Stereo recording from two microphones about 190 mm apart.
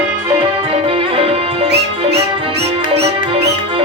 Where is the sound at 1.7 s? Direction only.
60° right (ahead or behind).